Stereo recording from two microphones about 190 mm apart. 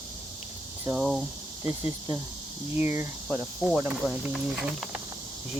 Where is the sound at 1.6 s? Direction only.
20° right (ahead or behind).